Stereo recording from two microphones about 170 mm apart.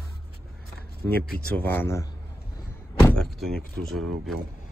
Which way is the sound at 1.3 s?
10° left (ahead or behind).